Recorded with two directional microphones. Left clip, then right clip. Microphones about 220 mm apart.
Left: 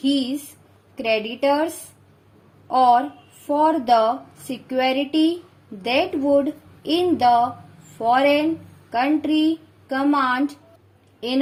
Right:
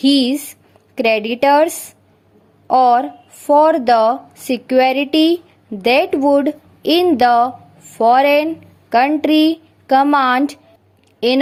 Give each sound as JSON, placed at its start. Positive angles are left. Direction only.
{"t": 0.0, "sound": "a woman's voice", "side_deg": -25}
{"t": 2.6, "sound": "a woman's voice", "side_deg": -25}